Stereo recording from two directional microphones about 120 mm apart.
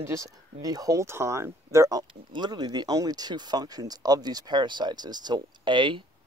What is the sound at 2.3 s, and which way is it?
A man's voice, 35° right (ahead or behind).